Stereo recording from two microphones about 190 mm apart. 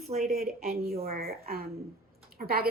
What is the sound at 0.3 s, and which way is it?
A woman's voice, 50° right (ahead or behind).